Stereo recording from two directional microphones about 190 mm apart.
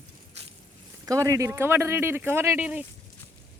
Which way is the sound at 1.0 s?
15° right (ahead or behind).